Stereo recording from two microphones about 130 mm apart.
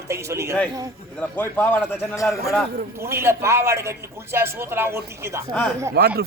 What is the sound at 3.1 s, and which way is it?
A man's voice, 20° right (ahead or behind).